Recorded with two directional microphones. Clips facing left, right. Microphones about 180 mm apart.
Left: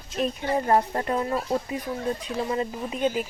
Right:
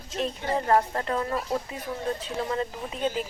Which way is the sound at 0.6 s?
25° left (ahead or behind).